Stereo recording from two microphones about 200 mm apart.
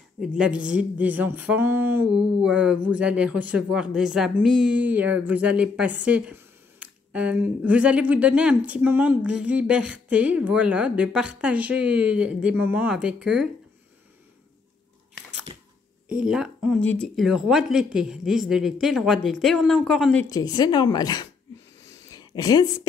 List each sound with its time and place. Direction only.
0.2 s speech: 5° right (ahead or behind)
16.1 s speech: 5° right (ahead or behind)
20.2 s a woman's voice: 20° left (ahead or behind)
22.0 s a sound: 20° left (ahead or behind)